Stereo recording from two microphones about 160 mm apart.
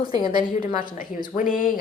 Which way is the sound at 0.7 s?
60° left (ahead or behind).